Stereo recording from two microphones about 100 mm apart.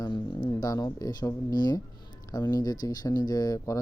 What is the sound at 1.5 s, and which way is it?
Speech, 40° left (ahead or behind).